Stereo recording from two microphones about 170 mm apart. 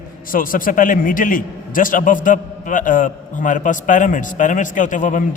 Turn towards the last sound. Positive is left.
turn(degrees=50)  # may be behind; listen again after turning